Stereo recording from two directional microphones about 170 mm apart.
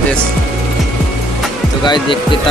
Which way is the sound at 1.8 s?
30° left (ahead or behind).